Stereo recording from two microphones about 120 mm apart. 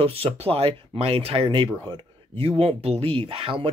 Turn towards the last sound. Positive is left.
turn(degrees=-50)  # may be behind; listen again after turning